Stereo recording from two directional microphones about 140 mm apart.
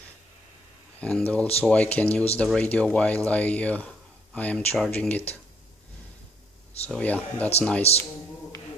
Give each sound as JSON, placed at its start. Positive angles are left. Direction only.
{"t": 1.0, "sound": "speech", "side_deg": 10}
{"t": 6.9, "sound": "speech", "side_deg": 10}
{"t": 7.9, "sound": "speech", "side_deg": 50}